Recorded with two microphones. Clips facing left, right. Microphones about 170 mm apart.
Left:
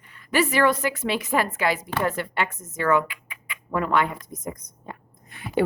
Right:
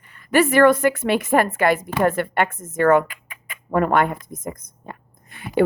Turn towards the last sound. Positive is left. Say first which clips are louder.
# right 1 dB
turn(degrees=-55)  # may be behind; listen again after turning